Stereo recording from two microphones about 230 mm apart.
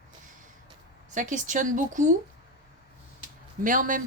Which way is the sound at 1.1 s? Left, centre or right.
Right.